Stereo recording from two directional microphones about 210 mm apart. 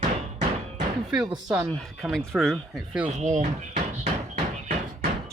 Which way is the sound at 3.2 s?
35° right (ahead or behind).